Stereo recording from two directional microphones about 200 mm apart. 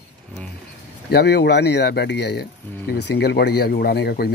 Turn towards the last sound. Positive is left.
turn(degrees=55)  # may be behind; listen again after turning